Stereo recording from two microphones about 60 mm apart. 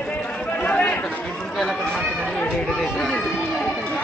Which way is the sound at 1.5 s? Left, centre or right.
Centre.